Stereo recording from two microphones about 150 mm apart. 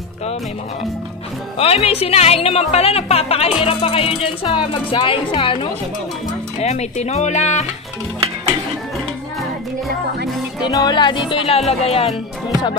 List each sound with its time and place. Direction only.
1.6 s speech: 40° left (ahead or behind)
6.6 s speech: 45° left (ahead or behind)
10.6 s speech: 25° left (ahead or behind); by 12.1 s 45° left (ahead or behind)